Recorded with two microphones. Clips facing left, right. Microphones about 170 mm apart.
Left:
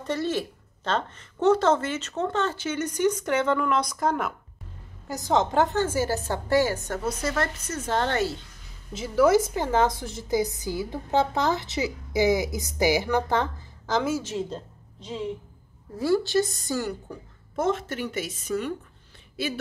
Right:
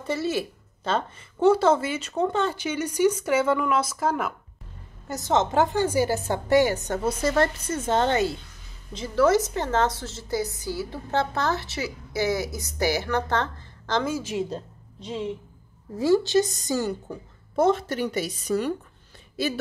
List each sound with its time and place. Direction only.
0.0 s a woman's voice: 5° right (ahead or behind)
8.9 s a woman's voice: 10° left (ahead or behind)
14.2 s a woman's voice: 10° right (ahead or behind)
17.6 s a woman's voice: 35° right (ahead or behind)